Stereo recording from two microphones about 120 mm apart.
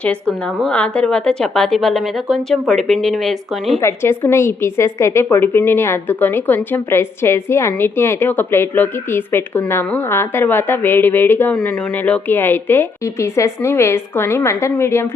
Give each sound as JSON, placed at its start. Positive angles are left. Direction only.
{"t": 0.0, "sound": "a woman's voice", "side_deg": 10}
{"t": 3.8, "sound": "a woman's voice", "side_deg": 20}